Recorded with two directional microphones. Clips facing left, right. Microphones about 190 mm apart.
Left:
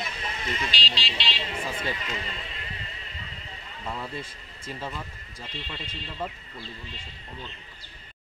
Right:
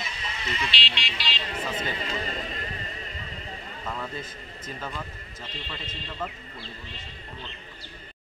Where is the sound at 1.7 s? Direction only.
35° right (ahead or behind).